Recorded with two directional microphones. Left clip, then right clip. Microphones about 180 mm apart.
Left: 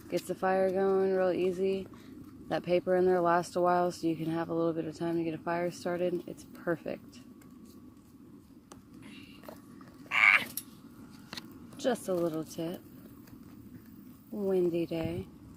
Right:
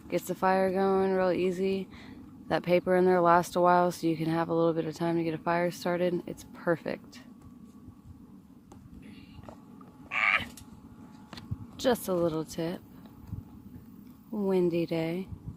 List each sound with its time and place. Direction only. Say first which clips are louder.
0.3 s speech: right 2 dB; 40° right (ahead or behind)
10.1 s frog: left 3 dB; 10° left (ahead or behind)
11.8 s speech: right 3 dB; 50° right (ahead or behind)
14.4 s speech: right 2 dB; 40° right (ahead or behind)